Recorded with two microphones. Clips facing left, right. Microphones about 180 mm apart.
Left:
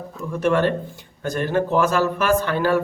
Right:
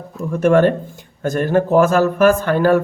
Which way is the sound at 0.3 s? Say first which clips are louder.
Right 6 dB; 50° right (ahead or behind).